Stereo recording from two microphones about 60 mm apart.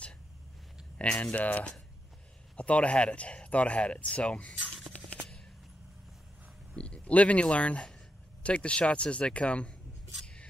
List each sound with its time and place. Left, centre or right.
0.9 s speech: centre
6.7 s speech: centre